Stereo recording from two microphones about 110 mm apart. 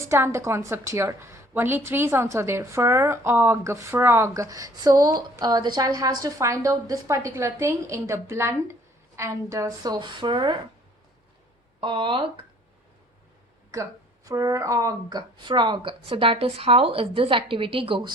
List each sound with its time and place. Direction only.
0.0 s a woman's voice: 25° right (ahead or behind); by 10.6 s 45° right (ahead or behind)
11.8 s speech: 50° right (ahead or behind)
14.3 s a woman's voice: 30° right (ahead or behind)
15.4 s speech: 45° right (ahead or behind)